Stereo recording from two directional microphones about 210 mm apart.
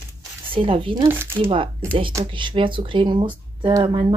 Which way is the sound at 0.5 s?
25° right (ahead or behind).